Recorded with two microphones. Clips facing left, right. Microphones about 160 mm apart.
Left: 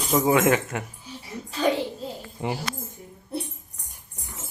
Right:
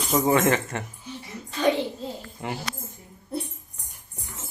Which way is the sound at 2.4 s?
25° left (ahead or behind).